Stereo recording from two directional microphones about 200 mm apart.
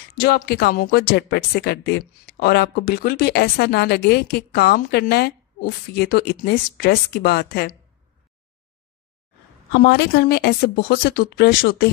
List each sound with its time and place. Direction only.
0.1 s a woman's voice: 50° left (ahead or behind)
9.7 s a woman's voice: 55° left (ahead or behind)